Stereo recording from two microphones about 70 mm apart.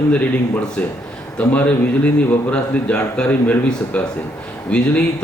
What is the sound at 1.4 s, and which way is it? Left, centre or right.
A man's voice, centre.